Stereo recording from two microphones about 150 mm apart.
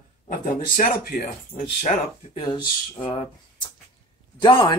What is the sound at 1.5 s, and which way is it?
Speech, 45° left (ahead or behind).